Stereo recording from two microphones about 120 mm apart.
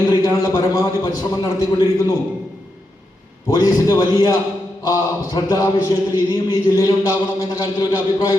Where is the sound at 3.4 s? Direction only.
30° left (ahead or behind).